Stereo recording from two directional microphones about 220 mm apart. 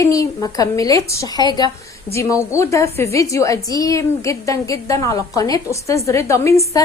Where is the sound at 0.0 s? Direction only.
15° left (ahead or behind).